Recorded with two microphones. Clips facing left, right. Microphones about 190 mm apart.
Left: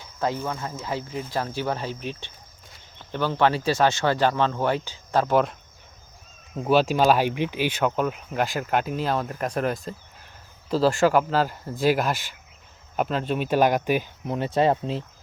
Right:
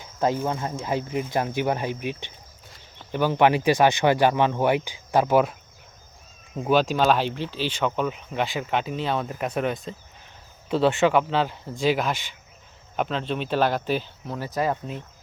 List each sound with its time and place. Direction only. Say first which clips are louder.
0.2 s speech: right 3 dB; 20° right (ahead or behind)
6.6 s speech: left 1 dB; 5° left (ahead or behind); by 15.0 s 30° left (ahead or behind)